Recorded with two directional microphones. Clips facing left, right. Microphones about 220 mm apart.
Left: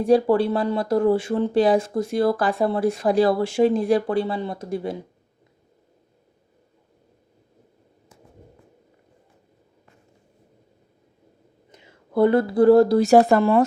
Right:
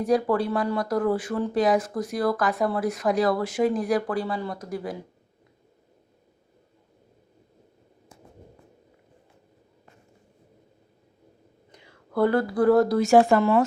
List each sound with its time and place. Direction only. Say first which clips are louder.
0.0 s speech: left 5 dB; 30° left (ahead or behind)
11.7 s speech: left 4 dB; 20° left (ahead or behind)